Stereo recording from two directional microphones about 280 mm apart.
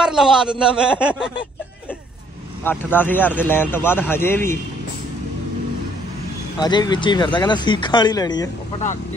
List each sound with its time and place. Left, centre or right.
0.0 s a man's voice: centre
2.6 s speech: centre
6.6 s speech: centre